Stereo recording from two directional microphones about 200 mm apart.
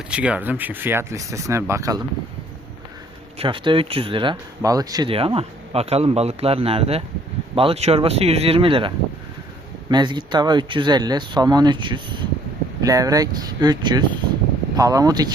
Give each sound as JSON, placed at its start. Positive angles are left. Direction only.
{"t": 0.1, "sound": "speech", "side_deg": -5}
{"t": 3.3, "sound": "speech", "side_deg": -25}
{"t": 9.9, "sound": "speech", "side_deg": -20}